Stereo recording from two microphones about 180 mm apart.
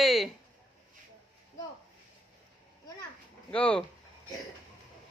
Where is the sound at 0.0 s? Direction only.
Centre (ahead or behind).